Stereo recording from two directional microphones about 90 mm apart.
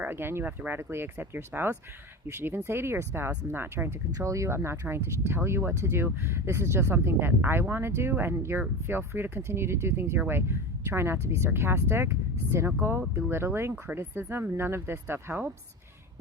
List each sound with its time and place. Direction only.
0.0 s speech: 25° right (ahead or behind)